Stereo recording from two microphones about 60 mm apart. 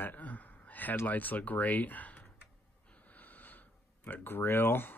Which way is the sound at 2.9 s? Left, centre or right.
Left.